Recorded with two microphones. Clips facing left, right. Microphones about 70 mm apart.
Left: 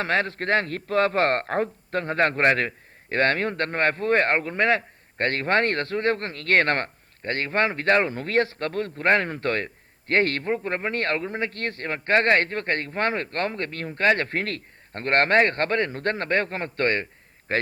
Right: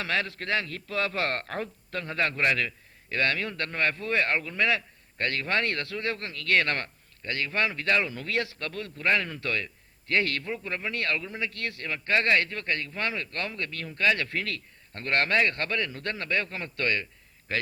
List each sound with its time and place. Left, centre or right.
0.0 s a man's voice: left